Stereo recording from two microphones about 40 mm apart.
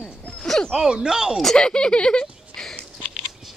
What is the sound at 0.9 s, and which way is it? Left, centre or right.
Speech, centre.